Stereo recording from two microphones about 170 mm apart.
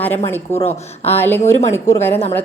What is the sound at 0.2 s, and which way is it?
Speech, 40° left (ahead or behind).